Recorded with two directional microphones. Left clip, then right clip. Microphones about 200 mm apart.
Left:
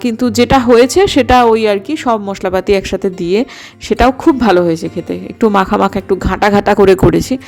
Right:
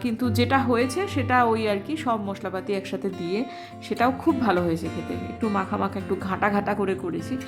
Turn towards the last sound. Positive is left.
turn(degrees=45)  # may be behind; listen again after turning